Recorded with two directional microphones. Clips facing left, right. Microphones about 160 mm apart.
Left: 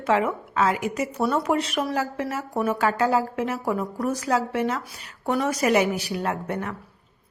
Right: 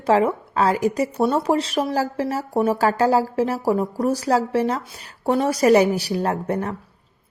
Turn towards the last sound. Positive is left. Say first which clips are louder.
# right 5 dB
turn(degrees=-35)  # may be behind; listen again after turning